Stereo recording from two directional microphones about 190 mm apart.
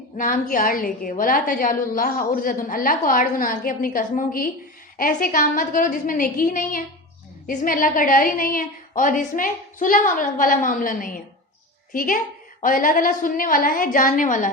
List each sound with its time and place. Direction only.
0.2 s a woman's voice: 45° left (ahead or behind)